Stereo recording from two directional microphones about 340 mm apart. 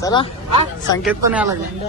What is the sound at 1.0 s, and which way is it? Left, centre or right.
Speech, centre.